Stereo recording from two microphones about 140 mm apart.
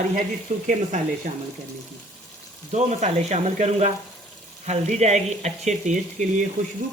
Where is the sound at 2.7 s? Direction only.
55° right (ahead or behind).